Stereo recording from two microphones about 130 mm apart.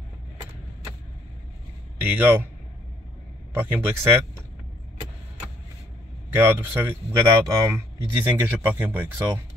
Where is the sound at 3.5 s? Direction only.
15° right (ahead or behind).